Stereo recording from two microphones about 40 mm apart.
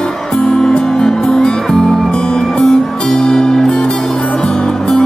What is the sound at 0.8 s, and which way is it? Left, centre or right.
Music, centre.